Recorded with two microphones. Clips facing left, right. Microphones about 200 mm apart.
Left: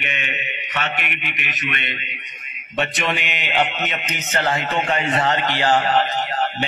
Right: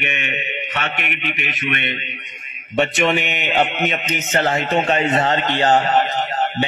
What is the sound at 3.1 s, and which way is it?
Speech, 25° right (ahead or behind).